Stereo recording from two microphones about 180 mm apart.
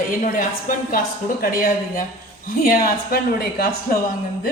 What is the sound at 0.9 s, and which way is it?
Speech, 50° left (ahead or behind).